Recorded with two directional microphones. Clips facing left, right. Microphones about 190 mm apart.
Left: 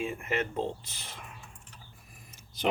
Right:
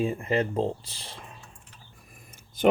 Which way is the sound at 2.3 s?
50° right (ahead or behind).